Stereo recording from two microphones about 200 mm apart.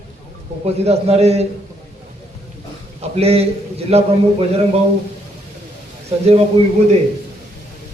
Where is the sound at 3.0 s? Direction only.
30° right (ahead or behind).